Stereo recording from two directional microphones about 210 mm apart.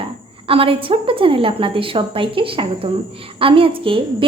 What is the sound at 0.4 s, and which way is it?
A woman's voice, 25° right (ahead or behind).